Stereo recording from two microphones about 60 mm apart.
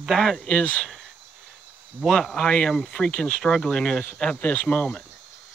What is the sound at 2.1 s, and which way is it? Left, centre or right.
Speech, centre.